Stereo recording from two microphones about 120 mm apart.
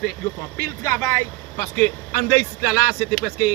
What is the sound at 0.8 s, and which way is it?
Speech, 20° left (ahead or behind).